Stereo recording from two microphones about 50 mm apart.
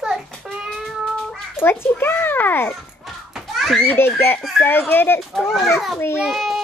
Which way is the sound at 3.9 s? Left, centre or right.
Left.